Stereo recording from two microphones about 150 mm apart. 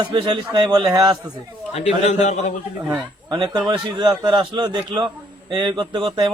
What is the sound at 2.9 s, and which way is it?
A man's voice, 30° right (ahead or behind).